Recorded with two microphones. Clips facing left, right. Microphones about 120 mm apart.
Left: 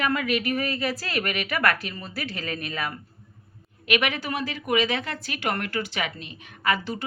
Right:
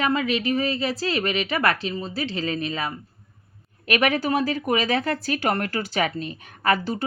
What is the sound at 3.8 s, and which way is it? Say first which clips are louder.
Speech: right 4 dB; 40° right (ahead or behind).